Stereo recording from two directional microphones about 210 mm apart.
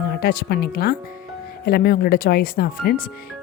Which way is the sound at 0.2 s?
50° left (ahead or behind).